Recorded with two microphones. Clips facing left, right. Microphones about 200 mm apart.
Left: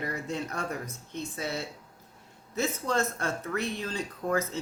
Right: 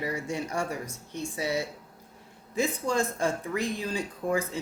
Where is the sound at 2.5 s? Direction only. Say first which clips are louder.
Right 2 dB; 15° right (ahead or behind).